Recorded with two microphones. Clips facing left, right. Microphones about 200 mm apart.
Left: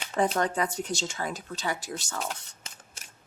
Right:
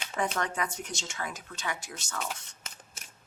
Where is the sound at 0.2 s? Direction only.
30° left (ahead or behind).